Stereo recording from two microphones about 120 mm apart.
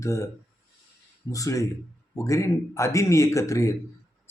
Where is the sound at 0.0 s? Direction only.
25° left (ahead or behind).